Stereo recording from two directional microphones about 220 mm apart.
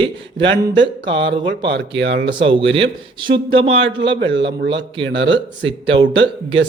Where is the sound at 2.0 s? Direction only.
50° right (ahead or behind).